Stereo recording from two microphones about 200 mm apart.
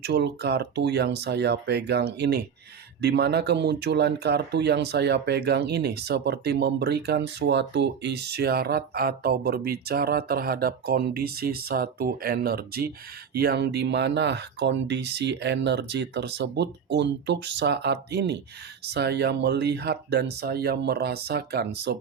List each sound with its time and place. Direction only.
0.0 s speech: 55° right (ahead or behind)